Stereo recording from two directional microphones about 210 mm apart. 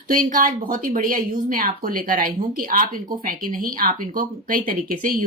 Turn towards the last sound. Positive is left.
turn(degrees=-40)  # may be behind; listen again after turning